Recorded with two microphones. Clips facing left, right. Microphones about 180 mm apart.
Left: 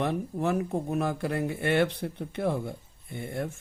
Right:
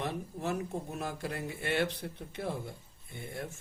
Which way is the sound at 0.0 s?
60° left (ahead or behind).